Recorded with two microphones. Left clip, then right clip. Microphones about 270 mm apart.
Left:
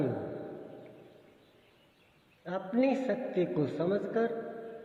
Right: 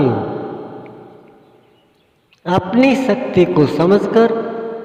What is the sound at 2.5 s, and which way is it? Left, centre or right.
A man's voice, right.